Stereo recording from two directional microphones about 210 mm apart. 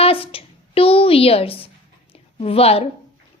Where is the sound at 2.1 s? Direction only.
30° left (ahead or behind).